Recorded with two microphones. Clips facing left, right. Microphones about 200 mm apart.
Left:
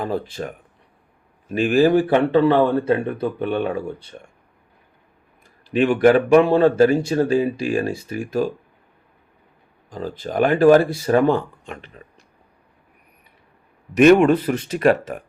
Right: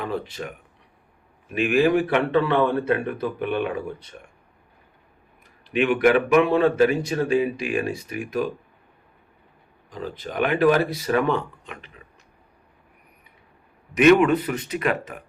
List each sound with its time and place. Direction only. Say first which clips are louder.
0.0 s speech: left 4 dB; 35° left (ahead or behind)
5.7 s speech: left 4 dB; 35° left (ahead or behind)
9.9 s speech: left 5 dB; 35° left (ahead or behind)
11.3 s speech: left 3 dB; 45° left (ahead or behind)
14.0 s speech: left 3 dB; 40° left (ahead or behind)